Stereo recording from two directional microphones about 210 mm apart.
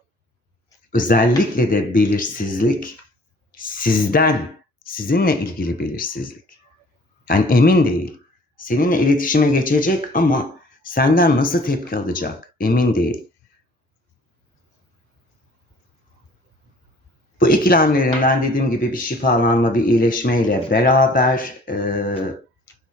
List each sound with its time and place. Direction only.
0.9 s speech: 40° left (ahead or behind)
7.3 s speech: 45° left (ahead or behind)
17.3 s speech: 40° left (ahead or behind)